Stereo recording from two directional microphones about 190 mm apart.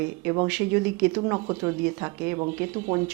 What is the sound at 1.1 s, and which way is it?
Speech, 25° right (ahead or behind).